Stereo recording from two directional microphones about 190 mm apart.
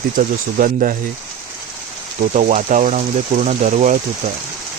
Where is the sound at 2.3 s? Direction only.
40° right (ahead or behind).